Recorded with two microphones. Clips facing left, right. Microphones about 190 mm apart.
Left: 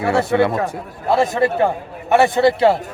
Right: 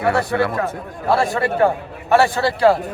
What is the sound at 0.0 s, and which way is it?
A man's voice, 25° left (ahead or behind).